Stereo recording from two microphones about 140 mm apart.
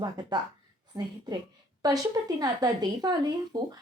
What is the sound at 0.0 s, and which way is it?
Speech, 30° right (ahead or behind).